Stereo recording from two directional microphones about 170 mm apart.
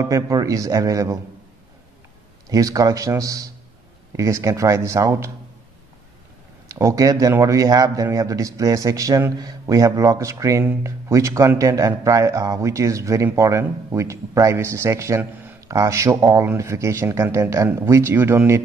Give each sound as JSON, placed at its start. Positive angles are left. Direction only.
{"t": 0.0, "sound": "speech", "side_deg": -20}
{"t": 2.5, "sound": "a man's voice", "side_deg": -20}
{"t": 6.7, "sound": "a man's voice", "side_deg": -20}